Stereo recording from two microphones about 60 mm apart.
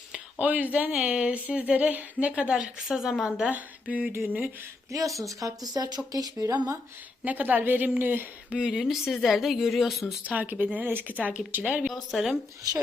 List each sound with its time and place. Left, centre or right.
0.3 s speech: right
2.6 s speech: centre
3.5 s speech: right
4.9 s speech: right
7.3 s speech: right
8.6 s speech: centre
10.2 s speech: right
11.9 s speech: centre